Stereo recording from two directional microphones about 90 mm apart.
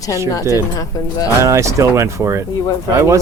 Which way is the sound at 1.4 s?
35° right (ahead or behind).